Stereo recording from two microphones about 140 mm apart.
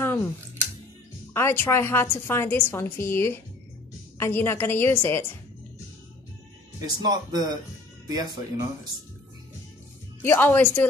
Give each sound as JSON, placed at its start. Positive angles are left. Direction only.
{"t": 0.0, "sound": "a sound", "side_deg": 15}
{"t": 1.3, "sound": "a woman's voice", "side_deg": 15}
{"t": 6.8, "sound": "speech", "side_deg": -30}
{"t": 10.2, "sound": "a woman's voice", "side_deg": 15}